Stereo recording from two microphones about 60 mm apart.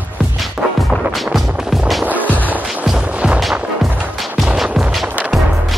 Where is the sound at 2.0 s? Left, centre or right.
Right.